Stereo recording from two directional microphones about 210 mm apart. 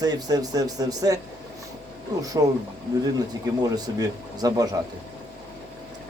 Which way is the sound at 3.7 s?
20° right (ahead or behind).